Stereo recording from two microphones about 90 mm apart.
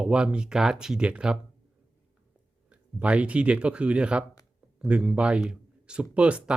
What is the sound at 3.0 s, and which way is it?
Speech, 15° right (ahead or behind).